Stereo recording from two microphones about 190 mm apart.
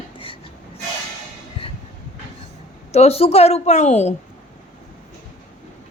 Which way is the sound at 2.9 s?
35° left (ahead or behind).